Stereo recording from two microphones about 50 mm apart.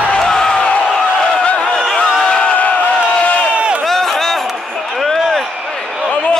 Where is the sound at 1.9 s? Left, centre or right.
Centre.